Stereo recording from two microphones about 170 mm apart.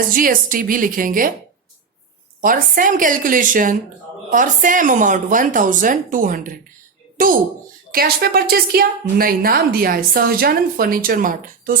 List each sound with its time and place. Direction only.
0.1 s a woman's voice: 55° right (ahead or behind)
2.4 s speech: 55° right (ahead or behind)
7.9 s a woman's voice: 60° right (ahead or behind)